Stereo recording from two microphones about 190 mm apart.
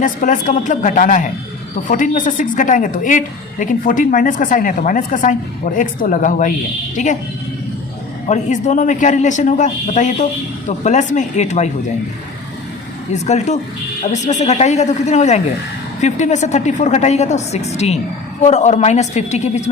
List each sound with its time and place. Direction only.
0.0 s a woman's voice: 40° left (ahead or behind)
8.3 s a woman's voice: 40° left (ahead or behind)
13.2 s a woman's voice: 35° left (ahead or behind)